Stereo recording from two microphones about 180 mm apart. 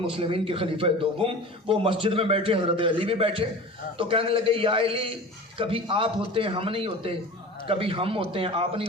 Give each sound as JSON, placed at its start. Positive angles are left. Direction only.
{"t": 0.1, "sound": "a man's voice", "side_deg": -30}